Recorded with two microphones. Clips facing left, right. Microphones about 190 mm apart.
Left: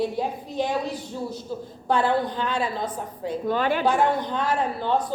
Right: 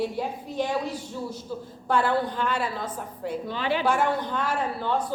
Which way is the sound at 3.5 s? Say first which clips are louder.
Left 5 dB; 50° left (ahead or behind).